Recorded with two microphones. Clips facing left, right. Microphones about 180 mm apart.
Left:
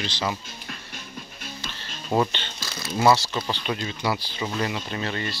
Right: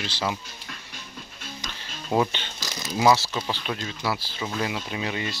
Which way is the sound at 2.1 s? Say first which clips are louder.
Even; 5° right (ahead or behind).